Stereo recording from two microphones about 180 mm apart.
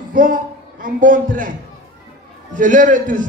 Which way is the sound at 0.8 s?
50° right (ahead or behind).